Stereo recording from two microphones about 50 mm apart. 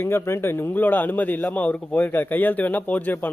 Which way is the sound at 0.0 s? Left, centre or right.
Left.